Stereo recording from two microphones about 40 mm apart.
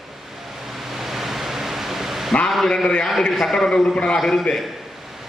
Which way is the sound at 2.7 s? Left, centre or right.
Centre.